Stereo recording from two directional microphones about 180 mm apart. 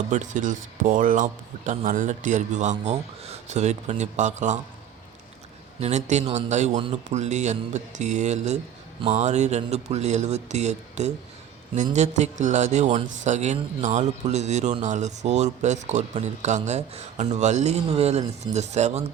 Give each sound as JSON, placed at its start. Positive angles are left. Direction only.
{"t": 0.1, "sound": "speech", "side_deg": -45}
{"t": 5.8, "sound": "speech", "side_deg": -40}